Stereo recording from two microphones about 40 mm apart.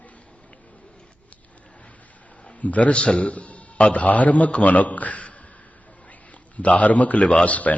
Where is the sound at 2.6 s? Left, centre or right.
Left.